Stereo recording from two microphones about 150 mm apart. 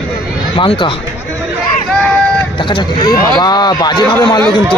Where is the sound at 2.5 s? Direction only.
30° left (ahead or behind).